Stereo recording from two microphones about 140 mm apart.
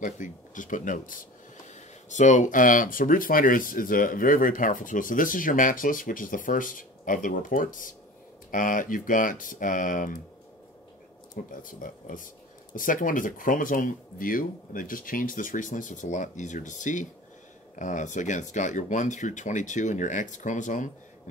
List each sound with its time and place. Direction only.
0.0 s speech: 70° left (ahead or behind)
2.0 s speech: 60° left (ahead or behind)
11.3 s speech: 75° left (ahead or behind)